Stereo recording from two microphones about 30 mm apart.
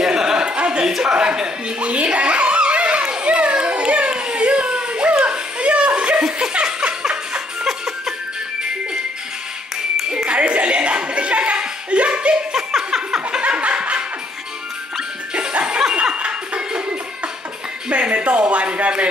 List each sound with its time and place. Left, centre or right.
0.0 s a sound: right
1.0 s a man's voice: right
1.8 s a sound: right
3.3 s children playing: right
4.4 s baby cry: right
5.2 s chuckle: right
6.5 s laughter: right
7.6 s music: centre
10.1 s chuckle: right
12.5 s a sound: centre
13.4 s laughter: right
15.3 s music: right
15.9 s laughter: right
17.8 s music: right